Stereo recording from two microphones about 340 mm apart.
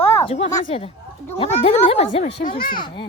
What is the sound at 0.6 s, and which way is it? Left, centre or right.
Speech, centre.